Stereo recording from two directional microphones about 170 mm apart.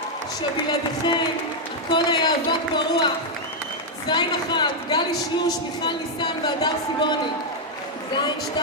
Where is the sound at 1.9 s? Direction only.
30° left (ahead or behind).